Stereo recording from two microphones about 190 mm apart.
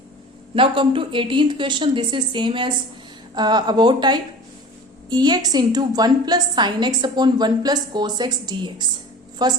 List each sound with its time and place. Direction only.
0.5 s a woman's voice: 25° right (ahead or behind)